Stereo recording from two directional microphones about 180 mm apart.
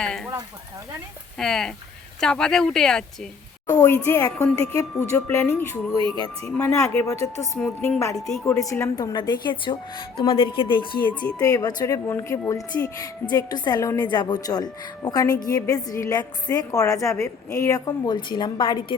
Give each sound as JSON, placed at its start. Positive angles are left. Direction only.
{"t": 0.0, "sound": "speech", "side_deg": 5}
{"t": 1.4, "sound": "speech", "side_deg": 0}
{"t": 3.7, "sound": "a woman's voice", "side_deg": 20}
{"t": 6.0, "sound": "speech", "side_deg": -25}
{"t": 6.4, "sound": "speech", "side_deg": 15}
{"t": 8.1, "sound": "speech", "side_deg": 5}
{"t": 8.5, "sound": "a woman's voice", "side_deg": 15}